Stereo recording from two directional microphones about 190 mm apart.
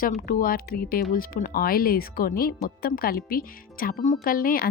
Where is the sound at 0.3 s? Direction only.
50° left (ahead or behind).